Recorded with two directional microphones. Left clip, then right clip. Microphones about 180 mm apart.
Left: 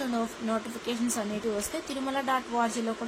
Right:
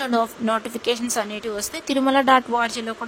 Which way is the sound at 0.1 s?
55° right (ahead or behind).